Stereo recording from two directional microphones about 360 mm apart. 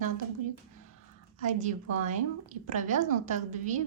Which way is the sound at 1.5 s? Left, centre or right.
Right.